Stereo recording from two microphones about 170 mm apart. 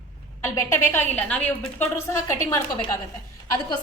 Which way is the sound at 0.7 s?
15° left (ahead or behind).